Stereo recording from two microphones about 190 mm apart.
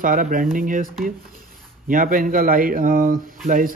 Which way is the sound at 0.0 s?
45° right (ahead or behind).